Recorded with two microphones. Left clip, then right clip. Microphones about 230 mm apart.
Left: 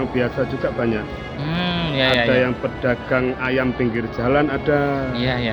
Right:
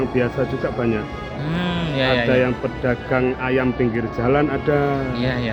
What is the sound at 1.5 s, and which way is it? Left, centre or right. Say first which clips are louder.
Speech: left 2 dB; centre.